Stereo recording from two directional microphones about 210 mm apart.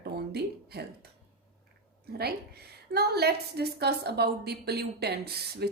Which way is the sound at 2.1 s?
50° right (ahead or behind).